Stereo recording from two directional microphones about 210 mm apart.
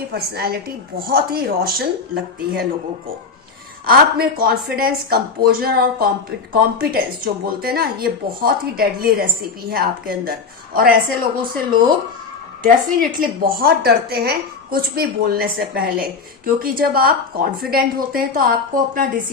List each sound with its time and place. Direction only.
0.1 s a woman's voice: 45° right (ahead or behind)
3.8 s a woman's voice: 45° right (ahead or behind)